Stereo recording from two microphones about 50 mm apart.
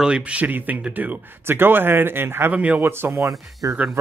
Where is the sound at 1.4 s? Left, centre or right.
Right.